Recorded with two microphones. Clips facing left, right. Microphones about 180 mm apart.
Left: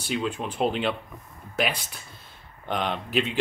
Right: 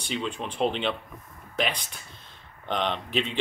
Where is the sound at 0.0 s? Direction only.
5° left (ahead or behind).